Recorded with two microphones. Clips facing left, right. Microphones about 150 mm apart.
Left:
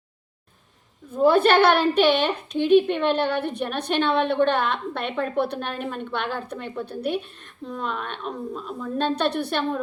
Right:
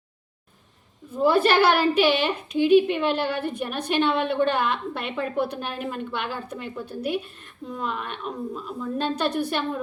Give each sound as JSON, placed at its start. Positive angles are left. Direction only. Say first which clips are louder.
{"t": 1.2, "sound": "a woman's voice", "louder": "left 2 dB", "side_deg": -5}